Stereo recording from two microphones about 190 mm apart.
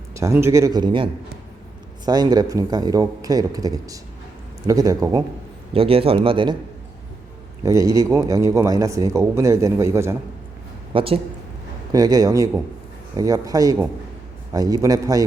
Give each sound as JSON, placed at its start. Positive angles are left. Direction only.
{"t": 0.1, "sound": "a man's voice", "side_deg": -15}
{"t": 5.7, "sound": "speech", "side_deg": -30}
{"t": 7.6, "sound": "a man's voice", "side_deg": -15}
{"t": 10.9, "sound": "speech", "side_deg": -30}